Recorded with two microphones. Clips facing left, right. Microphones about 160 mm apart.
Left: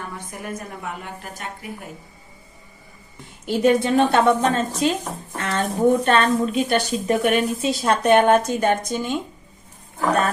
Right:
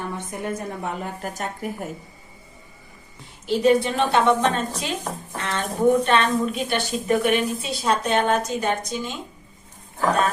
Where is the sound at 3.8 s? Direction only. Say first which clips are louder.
Left 3 dB; 40° left (ahead or behind).